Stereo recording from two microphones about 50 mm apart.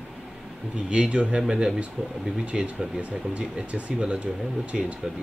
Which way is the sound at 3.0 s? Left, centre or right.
Right.